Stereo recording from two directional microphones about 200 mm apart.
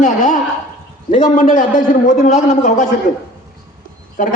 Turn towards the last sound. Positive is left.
turn(degrees=40)  # may be behind; listen again after turning